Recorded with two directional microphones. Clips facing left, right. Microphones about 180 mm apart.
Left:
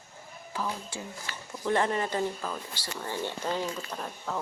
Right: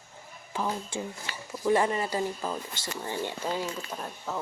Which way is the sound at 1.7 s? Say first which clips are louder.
Right 2 dB; 10° right (ahead or behind).